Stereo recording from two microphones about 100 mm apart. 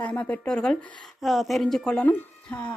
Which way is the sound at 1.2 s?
Centre (ahead or behind).